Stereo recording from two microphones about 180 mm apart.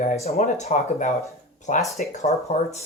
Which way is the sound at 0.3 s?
40° left (ahead or behind).